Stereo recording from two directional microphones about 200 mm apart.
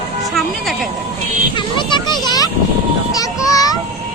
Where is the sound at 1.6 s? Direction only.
25° left (ahead or behind).